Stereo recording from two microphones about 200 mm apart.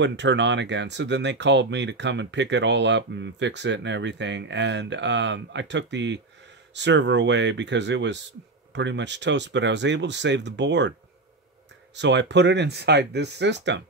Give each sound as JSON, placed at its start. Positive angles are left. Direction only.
{"t": 0.0, "sound": "speech", "side_deg": -60}